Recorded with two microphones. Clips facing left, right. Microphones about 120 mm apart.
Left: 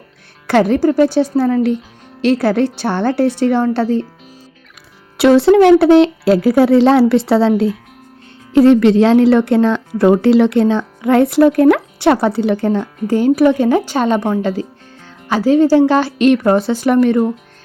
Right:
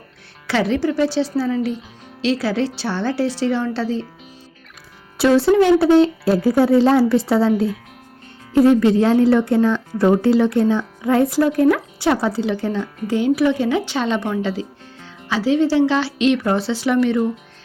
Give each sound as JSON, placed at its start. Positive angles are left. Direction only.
{"t": 0.4, "sound": "a woman's voice", "side_deg": 50}
{"t": 5.1, "sound": "speech", "side_deg": 65}
{"t": 13.1, "sound": "speech", "side_deg": 45}